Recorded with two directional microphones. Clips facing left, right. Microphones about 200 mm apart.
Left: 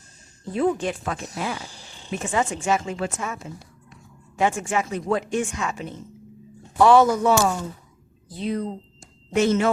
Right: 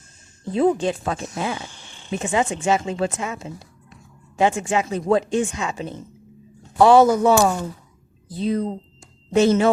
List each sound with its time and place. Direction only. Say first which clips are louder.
0.5 s a woman's voice: right 4 dB; 25° right (ahead or behind)
4.9 s a woman's voice: right 7 dB; 30° right (ahead or behind)